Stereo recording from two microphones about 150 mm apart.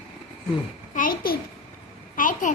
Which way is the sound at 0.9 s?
70° left (ahead or behind).